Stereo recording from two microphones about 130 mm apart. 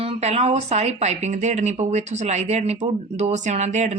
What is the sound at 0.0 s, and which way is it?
Speech, 55° right (ahead or behind).